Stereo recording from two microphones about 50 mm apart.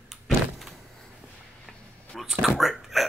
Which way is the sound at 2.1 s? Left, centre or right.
Centre.